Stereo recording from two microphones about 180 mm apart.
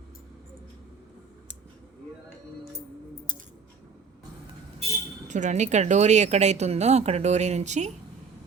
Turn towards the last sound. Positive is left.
turn(degrees=-40)  # may be behind; listen again after turning